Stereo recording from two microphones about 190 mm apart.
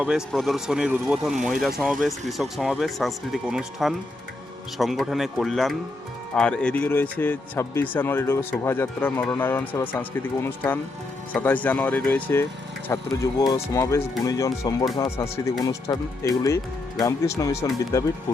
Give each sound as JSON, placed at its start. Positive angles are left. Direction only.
{"t": 0.0, "sound": "a man's voice", "side_deg": -5}